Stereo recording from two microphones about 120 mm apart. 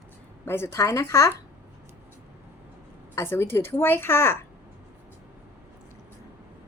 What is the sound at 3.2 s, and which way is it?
A woman's voice, 20° left (ahead or behind).